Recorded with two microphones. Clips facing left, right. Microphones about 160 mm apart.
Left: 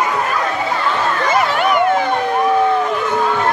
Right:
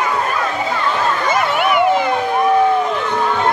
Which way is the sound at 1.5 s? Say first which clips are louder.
Even; 5° right (ahead or behind).